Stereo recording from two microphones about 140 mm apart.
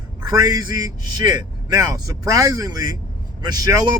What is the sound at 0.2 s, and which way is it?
Speech, 25° right (ahead or behind).